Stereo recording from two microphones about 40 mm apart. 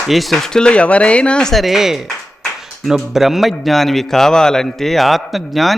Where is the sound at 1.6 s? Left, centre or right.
Centre.